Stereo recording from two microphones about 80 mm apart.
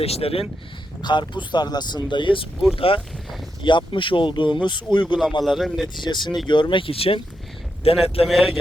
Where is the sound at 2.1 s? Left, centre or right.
Left.